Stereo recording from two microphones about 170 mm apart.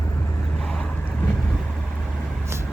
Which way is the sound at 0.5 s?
5° left (ahead or behind).